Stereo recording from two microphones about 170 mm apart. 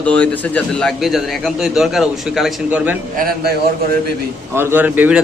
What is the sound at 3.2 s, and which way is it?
Speech, 60° right (ahead or behind).